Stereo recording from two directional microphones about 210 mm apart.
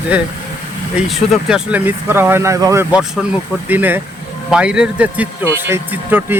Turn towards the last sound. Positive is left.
turn(degrees=-10)  # may be behind; listen again after turning